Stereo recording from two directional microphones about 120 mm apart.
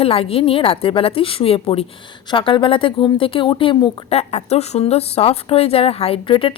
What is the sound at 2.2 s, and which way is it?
Speech, 45° left (ahead or behind).